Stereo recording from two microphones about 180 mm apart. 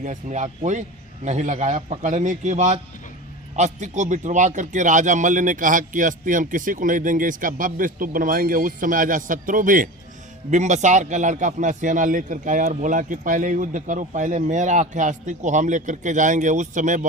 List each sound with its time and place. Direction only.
0.0 s a man's voice: 40° right (ahead or behind)